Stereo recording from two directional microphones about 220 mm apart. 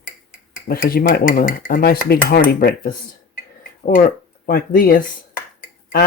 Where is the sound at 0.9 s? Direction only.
45° left (ahead or behind).